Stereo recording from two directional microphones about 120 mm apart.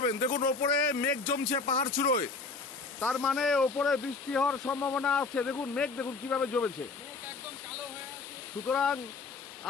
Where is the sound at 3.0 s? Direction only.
5° left (ahead or behind).